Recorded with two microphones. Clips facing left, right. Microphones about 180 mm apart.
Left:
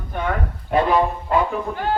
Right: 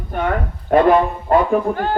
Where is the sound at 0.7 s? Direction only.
50° right (ahead or behind).